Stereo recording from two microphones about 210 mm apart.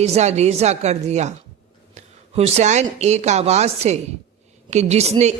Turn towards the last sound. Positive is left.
turn(degrees=-30)  # may be behind; listen again after turning